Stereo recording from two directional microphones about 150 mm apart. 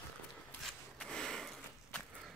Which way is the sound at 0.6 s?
5° left (ahead or behind).